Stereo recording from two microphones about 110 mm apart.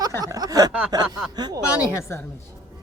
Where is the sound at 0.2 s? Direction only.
35° right (ahead or behind).